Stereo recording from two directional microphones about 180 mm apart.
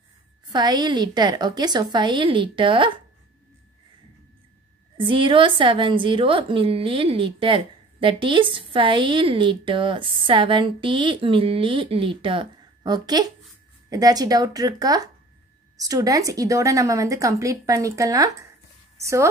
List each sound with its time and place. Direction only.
0.5 s a woman's voice: 25° right (ahead or behind)
4.9 s a woman's voice: 30° right (ahead or behind)